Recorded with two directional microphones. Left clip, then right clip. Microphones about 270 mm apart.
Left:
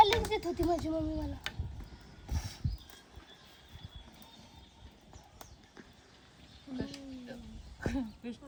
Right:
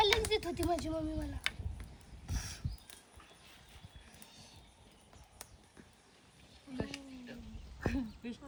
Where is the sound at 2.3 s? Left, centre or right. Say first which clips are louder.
Even; centre.